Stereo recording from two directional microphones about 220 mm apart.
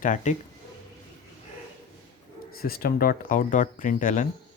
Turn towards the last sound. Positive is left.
turn(degrees=35)  # may be behind; listen again after turning